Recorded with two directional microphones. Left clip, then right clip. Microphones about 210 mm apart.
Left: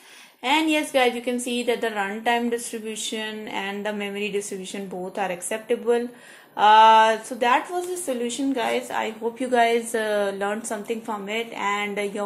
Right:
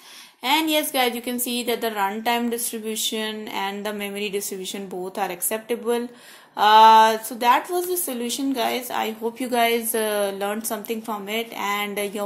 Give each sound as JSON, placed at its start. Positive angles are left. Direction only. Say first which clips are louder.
{"t": 0.4, "sound": "a woman's voice", "louder": "right 1 dB", "side_deg": -40}